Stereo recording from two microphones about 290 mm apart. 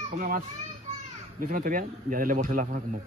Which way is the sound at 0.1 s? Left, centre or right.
Right.